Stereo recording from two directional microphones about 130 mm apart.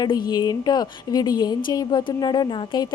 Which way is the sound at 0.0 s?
30° left (ahead or behind).